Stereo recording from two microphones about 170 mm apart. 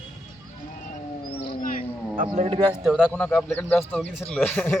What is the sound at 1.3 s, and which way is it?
Howl, 70° left (ahead or behind).